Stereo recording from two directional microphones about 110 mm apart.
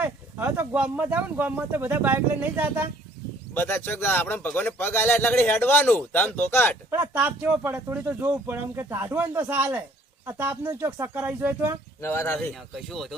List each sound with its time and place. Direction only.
0.0 s speech: 15° right (ahead or behind)
3.5 s a man's voice: 20° left (ahead or behind)
6.9 s speech: 15° right (ahead or behind)
12.0 s a man's voice: 20° left (ahead or behind)
12.7 s speech: centre (ahead or behind)